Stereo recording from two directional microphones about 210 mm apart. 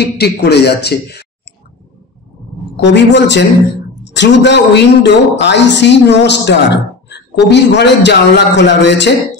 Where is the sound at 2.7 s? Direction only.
55° left (ahead or behind).